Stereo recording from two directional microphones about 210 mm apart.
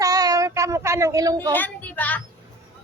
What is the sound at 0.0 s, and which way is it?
Child singing, 15° right (ahead or behind).